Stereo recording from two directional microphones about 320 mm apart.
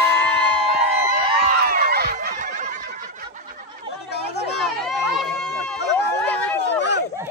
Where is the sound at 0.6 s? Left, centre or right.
Centre.